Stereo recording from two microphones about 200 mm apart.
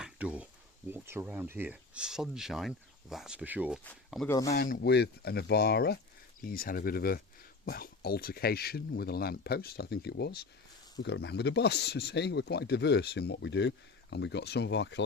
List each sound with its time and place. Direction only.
0.0 s a sound: 5° right (ahead or behind)
0.9 s speech: 10° right (ahead or behind)
4.3 s speech: 15° left (ahead or behind)
4.5 s speech: 45° left (ahead or behind); by 15.0 s 60° left (ahead or behind)